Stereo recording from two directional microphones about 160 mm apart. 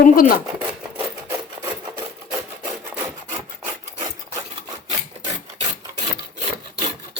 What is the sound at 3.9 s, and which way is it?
Rub, 20° right (ahead or behind).